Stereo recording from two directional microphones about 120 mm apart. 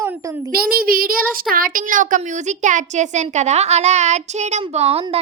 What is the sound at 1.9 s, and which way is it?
A woman's voice, 90° right.